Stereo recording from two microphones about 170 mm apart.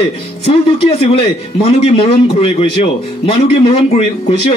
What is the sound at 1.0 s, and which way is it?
A man's voice, 35° left (ahead or behind).